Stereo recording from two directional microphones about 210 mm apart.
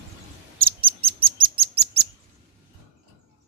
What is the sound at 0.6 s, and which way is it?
Bird, 45° right (ahead or behind).